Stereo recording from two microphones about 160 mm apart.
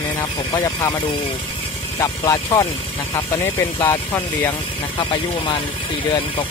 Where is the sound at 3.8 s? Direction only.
20° left (ahead or behind).